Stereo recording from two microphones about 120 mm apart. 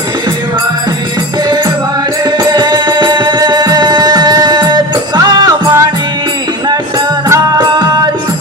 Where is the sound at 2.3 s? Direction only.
35° right (ahead or behind).